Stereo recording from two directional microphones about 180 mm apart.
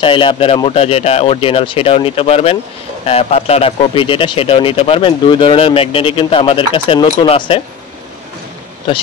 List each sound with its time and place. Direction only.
0.0 s speech: 30° left (ahead or behind)